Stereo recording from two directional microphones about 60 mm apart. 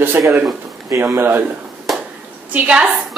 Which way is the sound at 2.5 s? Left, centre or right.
Right.